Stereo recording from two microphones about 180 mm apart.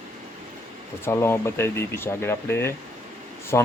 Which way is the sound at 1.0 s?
15° left (ahead or behind).